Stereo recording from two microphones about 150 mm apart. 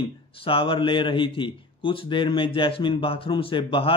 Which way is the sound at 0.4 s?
35° left (ahead or behind).